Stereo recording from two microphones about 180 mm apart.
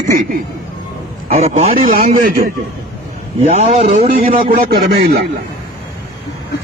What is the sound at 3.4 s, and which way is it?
Speech, 40° right (ahead or behind).